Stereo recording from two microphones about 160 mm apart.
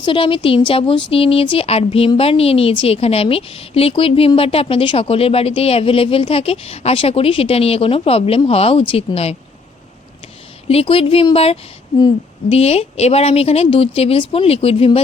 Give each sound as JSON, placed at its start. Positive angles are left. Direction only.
{"t": 0.0, "sound": "a woman's voice", "side_deg": 30}
{"t": 10.7, "sound": "a woman's voice", "side_deg": 35}